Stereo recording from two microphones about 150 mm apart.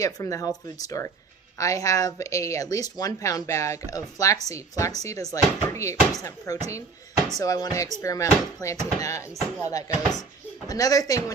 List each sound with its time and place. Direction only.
0.0 s speech: 20° left (ahead or behind)